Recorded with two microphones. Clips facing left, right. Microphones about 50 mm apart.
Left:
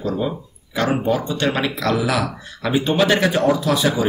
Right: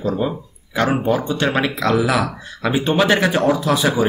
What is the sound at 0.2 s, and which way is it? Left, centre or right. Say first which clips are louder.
Speech: right 2 dB; centre.